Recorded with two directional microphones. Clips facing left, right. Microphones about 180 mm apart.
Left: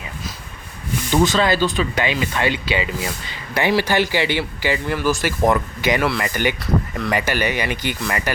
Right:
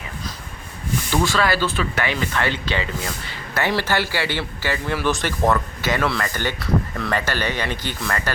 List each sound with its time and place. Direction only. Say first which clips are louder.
1.1 s speech: left 4 dB; 20° left (ahead or behind)
4.9 s speech: even; 5° left (ahead or behind)
5.5 s speech: left 2 dB; 15° left (ahead or behind)